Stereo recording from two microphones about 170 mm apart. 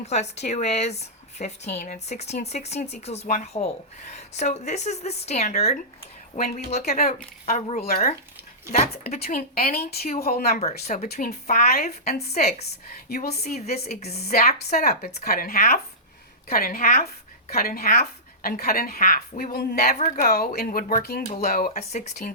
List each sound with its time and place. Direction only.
0.0 s speech: 40° left (ahead or behind)
9.2 s a woman's voice: 60° left (ahead or behind)
10.8 s a woman's voice: 50° left (ahead or behind)
21.7 s speech: 40° left (ahead or behind)